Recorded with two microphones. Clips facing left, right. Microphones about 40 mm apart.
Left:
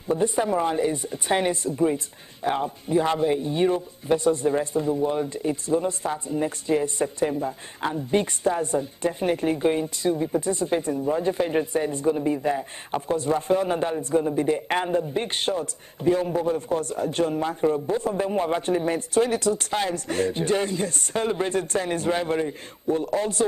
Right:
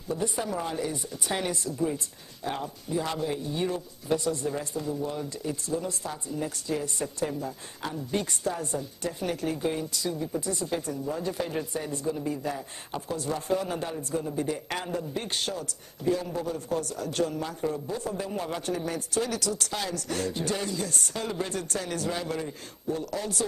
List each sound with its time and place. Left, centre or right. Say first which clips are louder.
0.1 s speech: left 8 dB; left